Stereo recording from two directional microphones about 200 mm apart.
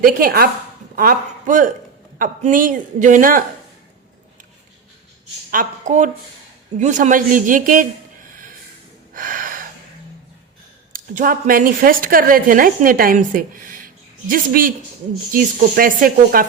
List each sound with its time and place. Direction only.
0.0 s a woman's voice: 45° right (ahead or behind)
5.5 s speech: 40° right (ahead or behind)
9.1 s a sound: 45° right (ahead or behind)
10.9 s a woman's voice: 40° right (ahead or behind)